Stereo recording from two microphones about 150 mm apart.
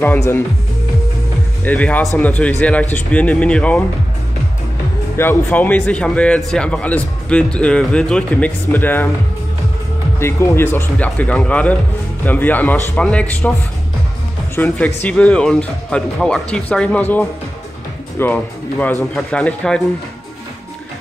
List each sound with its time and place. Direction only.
0.0 s speech: 15° left (ahead or behind)
1.6 s speech: 10° left (ahead or behind)
5.1 s speech: 15° left (ahead or behind)
10.1 s speech: 15° left (ahead or behind)
14.5 s a man's voice: 15° left (ahead or behind)